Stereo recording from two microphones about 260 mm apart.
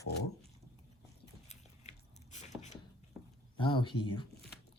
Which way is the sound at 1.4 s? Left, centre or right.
Left.